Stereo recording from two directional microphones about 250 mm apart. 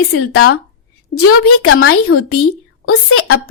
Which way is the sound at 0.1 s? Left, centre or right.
Left.